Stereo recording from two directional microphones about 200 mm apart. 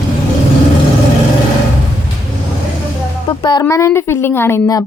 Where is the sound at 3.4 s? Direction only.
20° left (ahead or behind).